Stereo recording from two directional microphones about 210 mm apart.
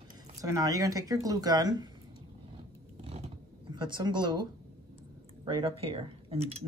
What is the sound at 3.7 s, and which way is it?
Speech, 20° right (ahead or behind).